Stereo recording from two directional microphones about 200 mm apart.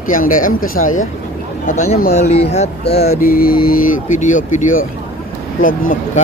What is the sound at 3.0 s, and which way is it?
Speech, 45° left (ahead or behind).